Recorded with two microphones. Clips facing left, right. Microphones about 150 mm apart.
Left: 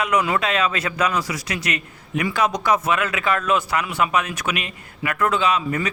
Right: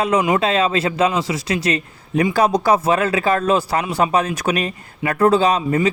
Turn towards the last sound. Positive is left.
turn(degrees=-30)  # may be behind; listen again after turning